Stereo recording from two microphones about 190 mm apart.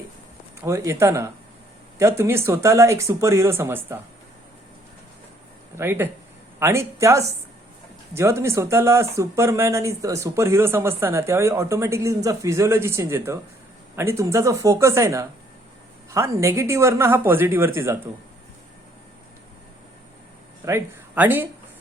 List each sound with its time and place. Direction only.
0.6 s speech: 15° right (ahead or behind)
5.7 s speech: 10° right (ahead or behind)
20.7 s speech: 10° right (ahead or behind)